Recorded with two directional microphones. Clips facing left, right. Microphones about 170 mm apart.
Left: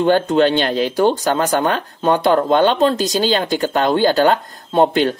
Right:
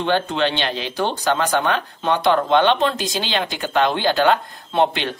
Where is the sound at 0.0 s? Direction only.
45° left (ahead or behind).